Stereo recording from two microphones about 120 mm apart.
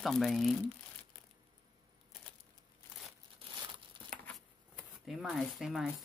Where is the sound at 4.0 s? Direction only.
40° right (ahead or behind).